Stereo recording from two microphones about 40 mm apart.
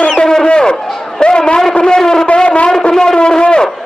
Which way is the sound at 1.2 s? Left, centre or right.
Left.